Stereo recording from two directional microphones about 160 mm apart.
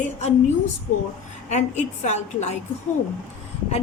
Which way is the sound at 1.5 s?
45° left (ahead or behind).